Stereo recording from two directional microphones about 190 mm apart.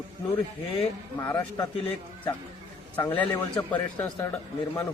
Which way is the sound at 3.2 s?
10° left (ahead or behind).